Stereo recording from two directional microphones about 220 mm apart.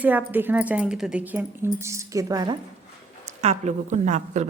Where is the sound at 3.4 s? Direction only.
30° right (ahead or behind).